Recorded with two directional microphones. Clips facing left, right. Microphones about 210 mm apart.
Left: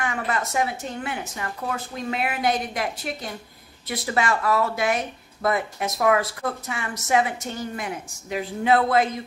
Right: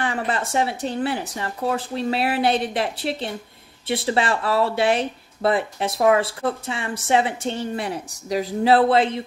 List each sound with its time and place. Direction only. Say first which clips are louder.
0.0 s speech: right 2 dB; 30° right (ahead or behind)